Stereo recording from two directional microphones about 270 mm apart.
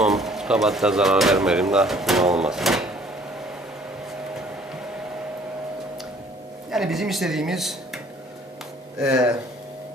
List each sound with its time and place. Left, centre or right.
0.0 s speech: centre
6.7 s speech: centre